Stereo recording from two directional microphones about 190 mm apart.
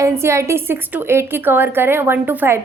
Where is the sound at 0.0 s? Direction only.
15° right (ahead or behind).